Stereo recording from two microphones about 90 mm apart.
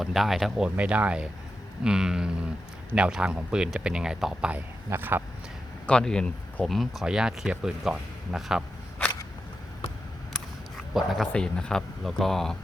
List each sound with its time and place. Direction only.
0.0 s speech: 5° right (ahead or behind)
0.8 s speech: 15° right (ahead or behind)
4.9 s a man's voice: 25° right (ahead or behind)
5.8 s speech: 10° left (ahead or behind); by 8.6 s 5° right (ahead or behind)
10.9 s speech: centre (ahead or behind)
11.3 s speech: 10° left (ahead or behind)